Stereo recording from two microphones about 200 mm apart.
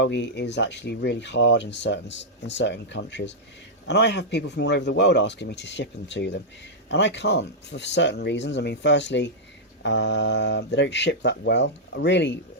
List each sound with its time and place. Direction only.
0.0 s speech: 60° left (ahead or behind)